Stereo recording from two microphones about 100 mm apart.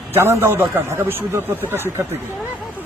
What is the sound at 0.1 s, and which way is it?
Speech, 25° right (ahead or behind).